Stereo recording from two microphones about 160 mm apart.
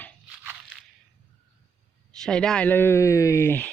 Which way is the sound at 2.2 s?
5° left (ahead or behind).